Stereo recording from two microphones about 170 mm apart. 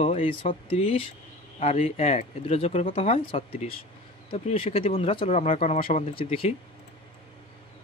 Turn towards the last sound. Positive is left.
turn(degrees=35)  # may be behind; listen again after turning